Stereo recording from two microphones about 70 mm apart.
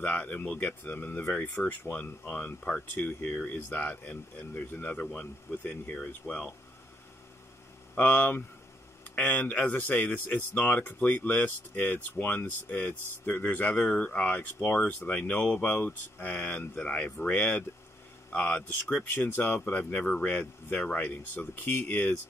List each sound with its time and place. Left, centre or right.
0.0 s speech: left
2.9 s speech: left
7.9 s speech: left